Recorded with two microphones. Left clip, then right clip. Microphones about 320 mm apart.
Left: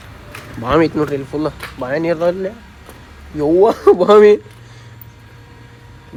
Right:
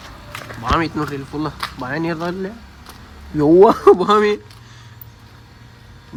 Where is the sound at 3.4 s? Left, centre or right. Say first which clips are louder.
Right 2 dB; right.